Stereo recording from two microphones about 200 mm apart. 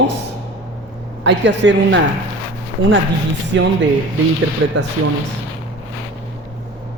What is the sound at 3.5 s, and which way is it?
Speech, 60° right (ahead or behind).